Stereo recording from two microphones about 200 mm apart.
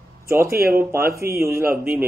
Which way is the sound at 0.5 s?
50° right (ahead or behind).